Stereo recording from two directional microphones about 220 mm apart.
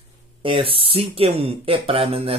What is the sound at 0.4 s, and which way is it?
Speech, 25° right (ahead or behind).